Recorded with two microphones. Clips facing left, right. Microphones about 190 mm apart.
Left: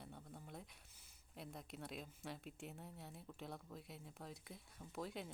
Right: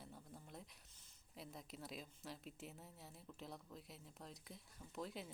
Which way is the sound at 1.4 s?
Centre (ahead or behind).